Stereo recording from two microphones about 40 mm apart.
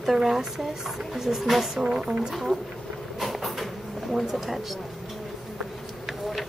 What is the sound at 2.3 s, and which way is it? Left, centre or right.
Speech, centre.